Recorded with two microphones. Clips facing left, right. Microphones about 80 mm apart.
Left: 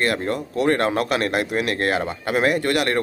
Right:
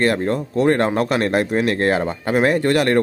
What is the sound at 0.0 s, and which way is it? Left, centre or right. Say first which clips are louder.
Speech: right 4 dB; right.